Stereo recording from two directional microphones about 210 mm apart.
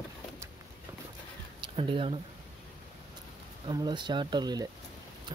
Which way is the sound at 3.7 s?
20° right (ahead or behind).